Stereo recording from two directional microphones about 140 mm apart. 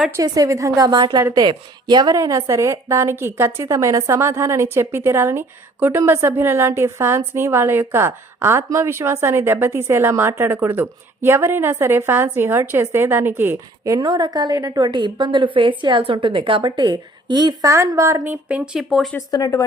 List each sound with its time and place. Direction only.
0.2 s a woman's voice: 25° right (ahead or behind); by 19.1 s centre (ahead or behind)
19.1 s speech: 25° left (ahead or behind)